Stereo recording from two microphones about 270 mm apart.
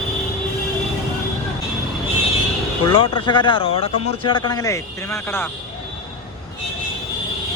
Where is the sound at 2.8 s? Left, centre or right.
Centre.